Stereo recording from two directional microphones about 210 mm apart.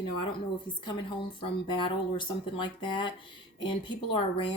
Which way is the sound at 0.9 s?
25° left (ahead or behind).